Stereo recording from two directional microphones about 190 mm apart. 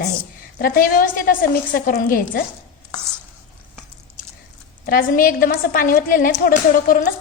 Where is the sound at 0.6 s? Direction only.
50° left (ahead or behind).